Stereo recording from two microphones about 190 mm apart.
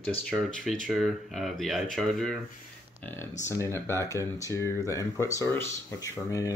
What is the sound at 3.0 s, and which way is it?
Speech, 15° left (ahead or behind).